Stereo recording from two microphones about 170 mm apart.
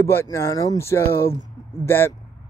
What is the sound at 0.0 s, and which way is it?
Speech, 15° left (ahead or behind).